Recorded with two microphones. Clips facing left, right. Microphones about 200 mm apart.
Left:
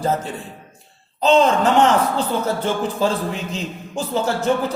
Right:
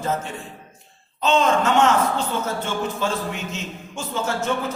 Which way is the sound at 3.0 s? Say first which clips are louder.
Left 5 dB; 35° left (ahead or behind).